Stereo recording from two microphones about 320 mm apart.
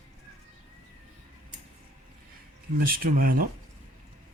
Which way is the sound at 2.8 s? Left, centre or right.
Right.